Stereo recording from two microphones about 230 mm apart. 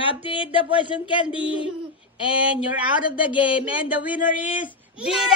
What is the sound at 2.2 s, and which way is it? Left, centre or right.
Speech, centre.